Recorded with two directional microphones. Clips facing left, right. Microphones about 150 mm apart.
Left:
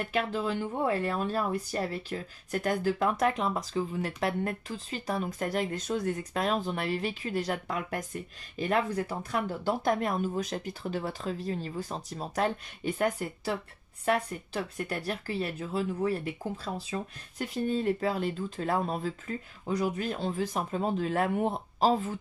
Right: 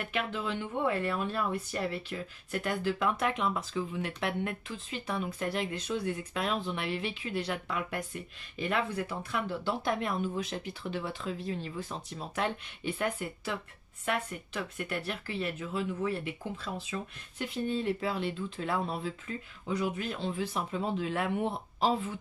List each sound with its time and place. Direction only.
0.0 s speech: 35° left (ahead or behind)